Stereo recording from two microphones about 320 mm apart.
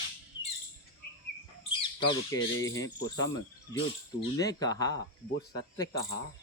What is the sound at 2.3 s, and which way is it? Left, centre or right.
Speech, left.